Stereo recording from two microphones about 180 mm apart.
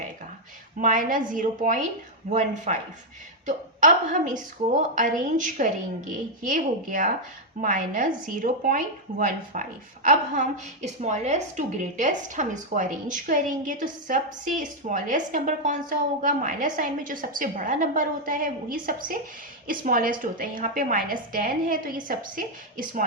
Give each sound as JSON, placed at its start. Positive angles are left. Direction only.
{"t": 0.8, "sound": "speech", "side_deg": -50}